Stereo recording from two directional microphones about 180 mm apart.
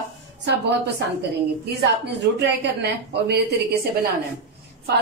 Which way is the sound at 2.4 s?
70° right (ahead or behind).